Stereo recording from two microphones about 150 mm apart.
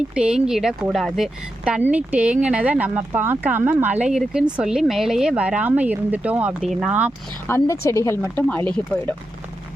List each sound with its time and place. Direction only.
0.1 s speech: 5° right (ahead or behind)
7.4 s speech: 15° left (ahead or behind)